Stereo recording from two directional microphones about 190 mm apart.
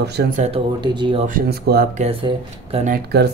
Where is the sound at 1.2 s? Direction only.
50° right (ahead or behind).